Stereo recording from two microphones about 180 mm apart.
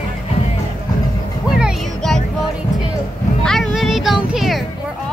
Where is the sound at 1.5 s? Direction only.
Centre (ahead or behind).